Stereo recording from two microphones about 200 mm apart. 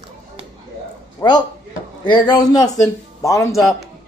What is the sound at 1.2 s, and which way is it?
A man's voice, 20° left (ahead or behind).